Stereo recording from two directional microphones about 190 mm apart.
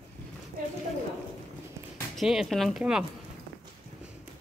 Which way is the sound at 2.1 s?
Centre (ahead or behind).